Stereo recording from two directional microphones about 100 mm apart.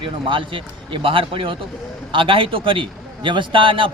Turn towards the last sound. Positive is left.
turn(degrees=-60)  # may be behind; listen again after turning